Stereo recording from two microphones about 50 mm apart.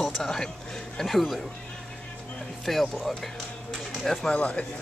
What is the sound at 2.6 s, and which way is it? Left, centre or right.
Speech, centre.